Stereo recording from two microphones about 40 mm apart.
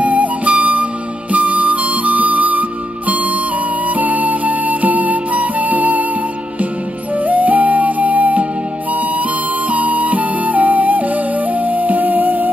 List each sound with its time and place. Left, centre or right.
0.0 s flute: right
1.3 s music: right
7.2 s flute: right
9.7 s flute: right